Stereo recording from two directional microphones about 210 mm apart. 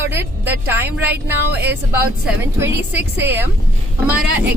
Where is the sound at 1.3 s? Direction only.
10° right (ahead or behind).